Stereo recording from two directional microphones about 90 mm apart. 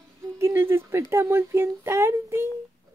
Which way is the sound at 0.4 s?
30° right (ahead or behind).